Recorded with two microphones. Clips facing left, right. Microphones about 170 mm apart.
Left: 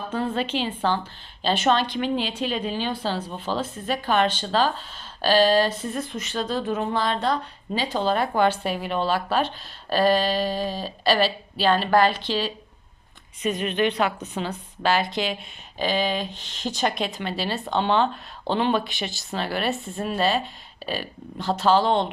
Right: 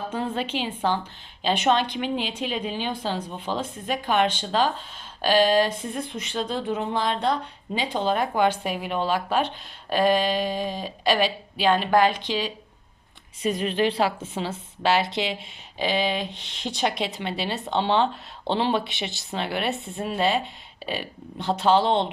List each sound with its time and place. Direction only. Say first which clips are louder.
0.1 s a woman's voice: left 4 dB; 10° right (ahead or behind)
13.4 s a woman's voice: even; 35° right (ahead or behind)
16.3 s speech: left 1 dB; 65° right (ahead or behind)
17.0 s a woman's voice: left 1 dB; 20° right (ahead or behind)